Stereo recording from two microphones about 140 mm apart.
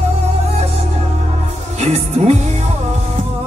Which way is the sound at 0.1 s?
50° right (ahead or behind).